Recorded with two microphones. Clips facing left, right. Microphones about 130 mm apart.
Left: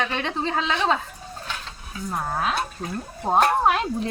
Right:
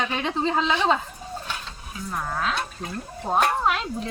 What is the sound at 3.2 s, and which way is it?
Speech, 30° left (ahead or behind).